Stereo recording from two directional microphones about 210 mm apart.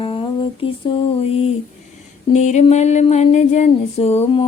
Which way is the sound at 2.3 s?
35° left (ahead or behind).